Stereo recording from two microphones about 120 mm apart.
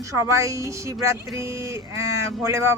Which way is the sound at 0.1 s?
25° right (ahead or behind).